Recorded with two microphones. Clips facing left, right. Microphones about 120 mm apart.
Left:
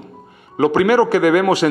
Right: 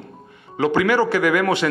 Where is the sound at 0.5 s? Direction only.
40° left (ahead or behind).